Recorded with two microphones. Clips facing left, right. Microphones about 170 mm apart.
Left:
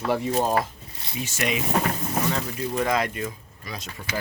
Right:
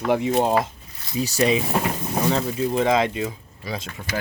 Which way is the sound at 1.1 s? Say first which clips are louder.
Right 7 dB; 35° right (ahead or behind).